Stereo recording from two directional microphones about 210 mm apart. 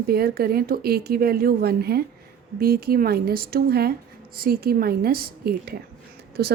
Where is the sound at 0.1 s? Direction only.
45° right (ahead or behind).